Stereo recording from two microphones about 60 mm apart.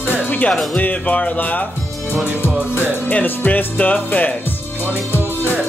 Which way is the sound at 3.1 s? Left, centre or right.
Left.